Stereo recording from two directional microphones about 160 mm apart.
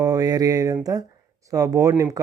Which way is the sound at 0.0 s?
20° right (ahead or behind).